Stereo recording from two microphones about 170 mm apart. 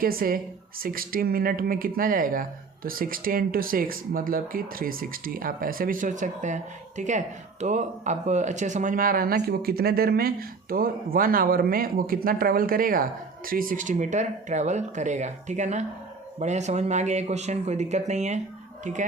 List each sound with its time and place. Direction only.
0.0 s speech: 60° right (ahead or behind)